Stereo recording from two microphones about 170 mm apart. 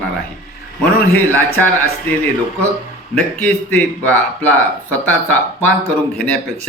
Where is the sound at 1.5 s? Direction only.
10° left (ahead or behind).